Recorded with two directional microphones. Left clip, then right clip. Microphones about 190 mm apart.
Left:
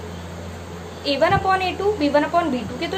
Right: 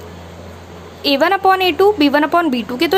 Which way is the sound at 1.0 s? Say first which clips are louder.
Right 5 dB; 55° right (ahead or behind).